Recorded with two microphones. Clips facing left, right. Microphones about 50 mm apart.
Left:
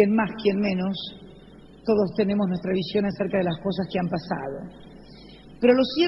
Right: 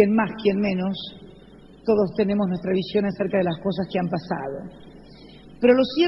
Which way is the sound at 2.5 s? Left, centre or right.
Centre.